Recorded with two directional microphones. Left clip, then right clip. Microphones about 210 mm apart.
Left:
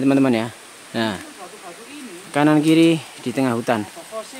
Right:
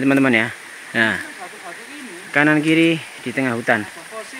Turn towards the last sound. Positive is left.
turn(degrees=15)  # may be behind; listen again after turning